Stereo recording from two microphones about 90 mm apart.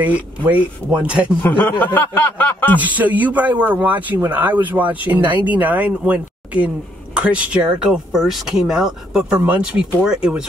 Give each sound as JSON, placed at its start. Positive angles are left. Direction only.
{"t": 0.0, "sound": "a man's voice", "side_deg": -15}
{"t": 1.6, "sound": "speech", "side_deg": 20}
{"t": 2.8, "sound": "a man's voice", "side_deg": -15}